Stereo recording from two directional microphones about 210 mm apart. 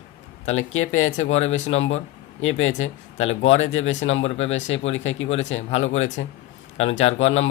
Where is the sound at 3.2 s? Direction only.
30° left (ahead or behind).